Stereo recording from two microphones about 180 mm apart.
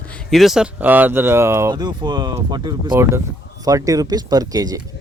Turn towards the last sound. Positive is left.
turn(degrees=-20)  # may be behind; listen again after turning